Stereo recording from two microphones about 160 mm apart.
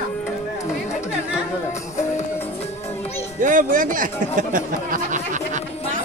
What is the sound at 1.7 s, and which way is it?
Music, 45° left (ahead or behind).